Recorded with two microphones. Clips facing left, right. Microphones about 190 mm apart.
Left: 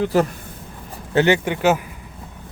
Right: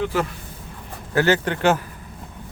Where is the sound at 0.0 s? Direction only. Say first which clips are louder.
Left 5 dB; 40° left (ahead or behind).